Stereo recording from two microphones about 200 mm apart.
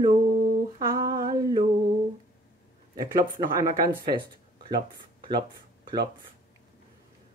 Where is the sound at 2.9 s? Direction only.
20° right (ahead or behind).